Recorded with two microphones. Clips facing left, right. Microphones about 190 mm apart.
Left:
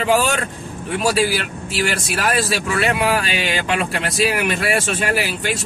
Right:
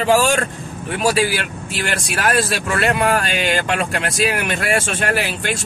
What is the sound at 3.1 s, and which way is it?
Speech, 50° right (ahead or behind).